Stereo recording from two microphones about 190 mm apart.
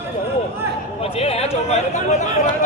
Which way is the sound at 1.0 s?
30° left (ahead or behind).